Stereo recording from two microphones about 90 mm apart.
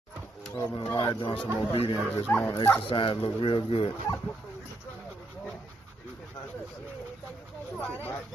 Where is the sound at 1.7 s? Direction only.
70° left (ahead or behind).